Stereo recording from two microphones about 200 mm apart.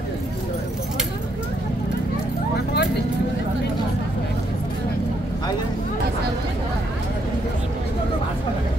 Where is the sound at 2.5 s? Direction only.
55° left (ahead or behind).